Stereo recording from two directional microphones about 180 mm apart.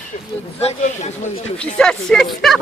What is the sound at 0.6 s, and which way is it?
Speech, 35° left (ahead or behind).